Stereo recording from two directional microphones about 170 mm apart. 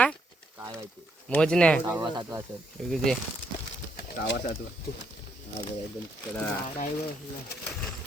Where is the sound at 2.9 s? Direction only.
Centre (ahead or behind).